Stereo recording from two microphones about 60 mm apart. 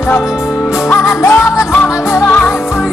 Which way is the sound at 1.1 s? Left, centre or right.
Left.